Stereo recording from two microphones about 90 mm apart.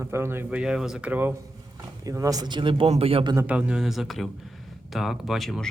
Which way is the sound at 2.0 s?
40° right (ahead or behind).